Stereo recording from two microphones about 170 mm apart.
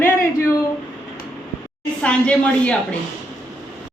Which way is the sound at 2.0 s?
5° left (ahead or behind).